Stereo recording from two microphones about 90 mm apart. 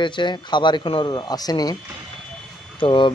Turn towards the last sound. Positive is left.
turn(degrees=65)  # may be behind; listen again after turning